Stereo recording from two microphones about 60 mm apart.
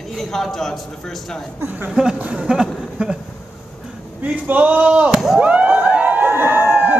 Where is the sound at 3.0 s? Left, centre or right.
Centre.